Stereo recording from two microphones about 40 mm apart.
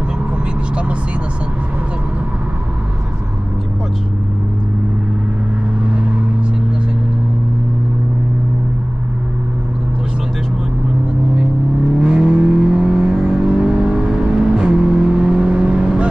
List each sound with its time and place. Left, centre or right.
12.0 s vehicle: right